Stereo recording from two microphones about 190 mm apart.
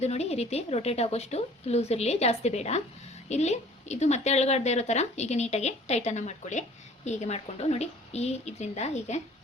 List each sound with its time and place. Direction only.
0.0 s a woman's voice: 35° left (ahead or behind)